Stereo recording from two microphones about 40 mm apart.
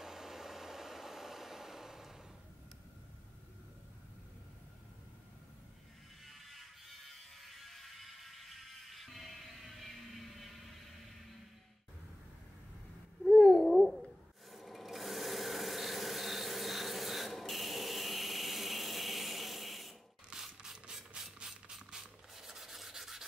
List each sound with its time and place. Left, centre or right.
0.0 s vehicle: centre
6.2 s mechanisms: centre
13.2 s babbling: centre
14.5 s filing: centre
20.3 s rub: centre
21.1 s ratchet: centre
21.9 s a sound: centre
22.3 s sanding: centre